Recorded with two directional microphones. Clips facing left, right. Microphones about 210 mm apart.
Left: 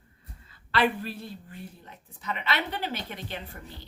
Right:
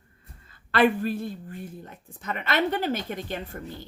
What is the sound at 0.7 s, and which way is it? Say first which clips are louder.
Speech: right 5 dB; 50° right (ahead or behind).